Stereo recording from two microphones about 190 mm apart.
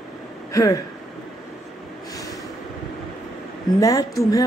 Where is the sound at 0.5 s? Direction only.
15° left (ahead or behind).